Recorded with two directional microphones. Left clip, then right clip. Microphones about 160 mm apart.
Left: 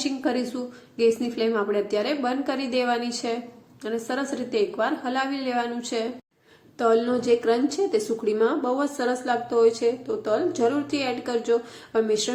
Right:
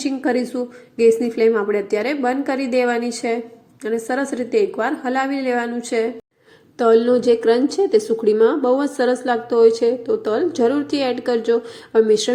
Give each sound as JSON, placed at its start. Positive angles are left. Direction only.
{"t": 0.0, "sound": "a woman's voice", "side_deg": -25}